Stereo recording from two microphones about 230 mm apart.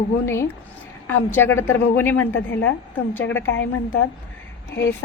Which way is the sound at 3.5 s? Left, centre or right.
Left.